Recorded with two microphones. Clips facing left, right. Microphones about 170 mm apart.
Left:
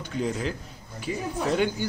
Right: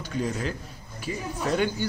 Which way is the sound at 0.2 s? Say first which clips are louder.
Left 1 dB; 15° left (ahead or behind).